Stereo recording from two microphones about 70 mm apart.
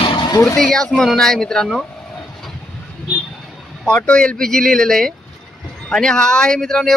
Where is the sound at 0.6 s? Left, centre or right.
Centre.